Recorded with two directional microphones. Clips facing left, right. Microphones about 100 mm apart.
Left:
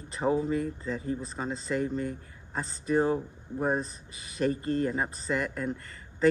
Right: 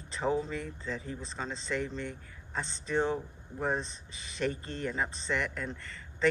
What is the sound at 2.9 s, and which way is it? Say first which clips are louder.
Speech: left 5 dB; 35° left (ahead or behind).